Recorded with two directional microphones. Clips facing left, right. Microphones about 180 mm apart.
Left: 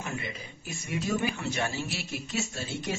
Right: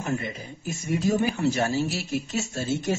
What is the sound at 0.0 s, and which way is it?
Speech, 45° right (ahead or behind).